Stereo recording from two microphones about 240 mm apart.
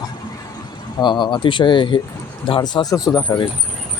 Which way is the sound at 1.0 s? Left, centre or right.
Centre.